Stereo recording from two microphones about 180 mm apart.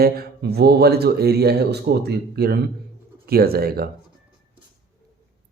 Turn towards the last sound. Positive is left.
turn(degrees=-55)  # may be behind; listen again after turning